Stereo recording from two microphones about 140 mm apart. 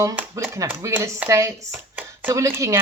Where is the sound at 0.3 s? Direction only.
20° right (ahead or behind).